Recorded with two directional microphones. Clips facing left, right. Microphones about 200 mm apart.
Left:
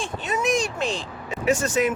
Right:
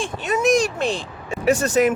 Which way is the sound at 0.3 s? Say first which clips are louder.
Right 6 dB; 45° right (ahead or behind).